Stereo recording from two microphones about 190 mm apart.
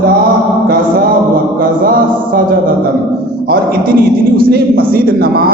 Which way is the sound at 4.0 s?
50° right (ahead or behind).